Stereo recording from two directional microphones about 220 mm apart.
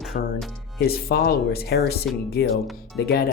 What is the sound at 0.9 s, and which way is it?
Speech, 45° left (ahead or behind).